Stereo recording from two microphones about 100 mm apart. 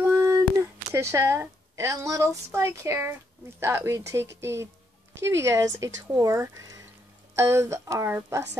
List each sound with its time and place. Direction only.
0.2 s speech: 30° right (ahead or behind)